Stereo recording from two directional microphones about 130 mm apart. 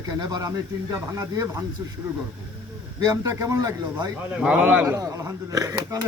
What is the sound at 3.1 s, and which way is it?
Speech, 25° right (ahead or behind).